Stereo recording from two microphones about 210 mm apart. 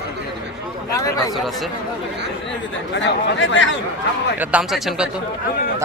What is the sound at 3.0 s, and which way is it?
Speech, 60° left (ahead or behind).